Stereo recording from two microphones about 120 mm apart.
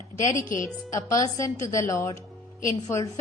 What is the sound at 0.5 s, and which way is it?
A woman's voice, 25° left (ahead or behind).